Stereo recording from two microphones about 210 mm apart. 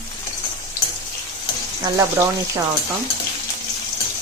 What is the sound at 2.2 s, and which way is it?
Speech, 15° right (ahead or behind).